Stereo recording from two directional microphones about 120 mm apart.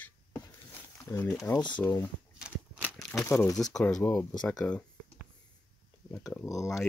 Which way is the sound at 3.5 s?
5° left (ahead or behind).